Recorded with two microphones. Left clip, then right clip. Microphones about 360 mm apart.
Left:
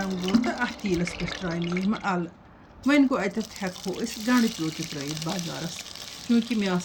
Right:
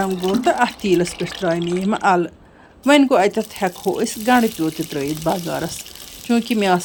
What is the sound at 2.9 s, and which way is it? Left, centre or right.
Speech, centre.